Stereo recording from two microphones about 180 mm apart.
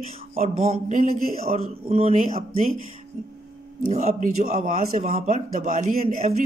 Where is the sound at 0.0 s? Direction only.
35° right (ahead or behind).